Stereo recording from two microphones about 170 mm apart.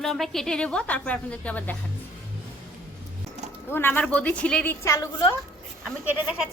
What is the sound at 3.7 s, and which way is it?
A woman's voice, 10° left (ahead or behind).